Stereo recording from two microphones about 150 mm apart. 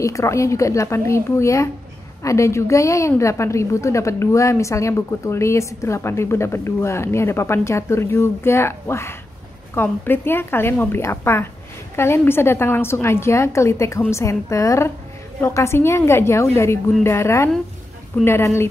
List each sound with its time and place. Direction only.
0.0 s a woman's voice: 20° left (ahead or behind)